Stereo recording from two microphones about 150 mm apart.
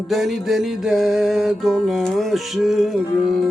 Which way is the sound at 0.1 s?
Centre (ahead or behind).